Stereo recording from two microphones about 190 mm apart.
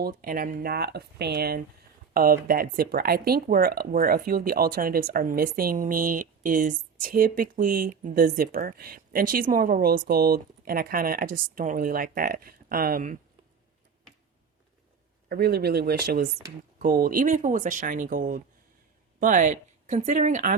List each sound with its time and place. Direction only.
0.0 s speech: 50° right (ahead or behind)
15.3 s speech: 55° right (ahead or behind); by 20.6 s 40° right (ahead or behind)